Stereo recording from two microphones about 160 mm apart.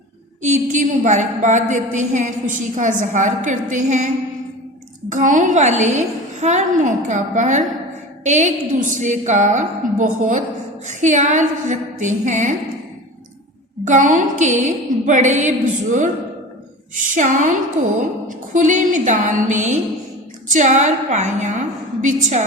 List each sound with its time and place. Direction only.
0.4 s a woman's voice: 50° right (ahead or behind)
5.1 s a woman's voice: 50° right (ahead or behind)
13.8 s a woman's voice: 50° right (ahead or behind)
17.2 s a woman's voice: 50° right (ahead or behind)